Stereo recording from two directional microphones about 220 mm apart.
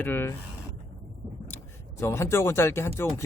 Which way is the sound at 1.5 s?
10° left (ahead or behind).